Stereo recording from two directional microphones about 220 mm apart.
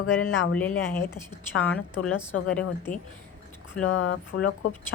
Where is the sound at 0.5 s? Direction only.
5° left (ahead or behind).